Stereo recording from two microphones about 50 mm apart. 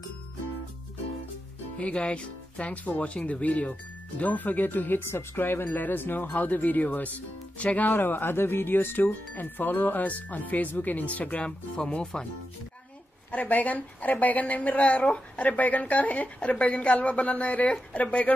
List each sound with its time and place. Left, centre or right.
1.8 s speech: left
11.7 s speech: centre
13.3 s speech: left